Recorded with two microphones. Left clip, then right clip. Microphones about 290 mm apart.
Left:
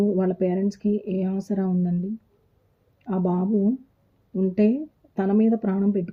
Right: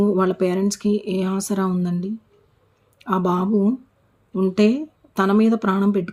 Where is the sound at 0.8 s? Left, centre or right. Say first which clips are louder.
Right 4 dB; right.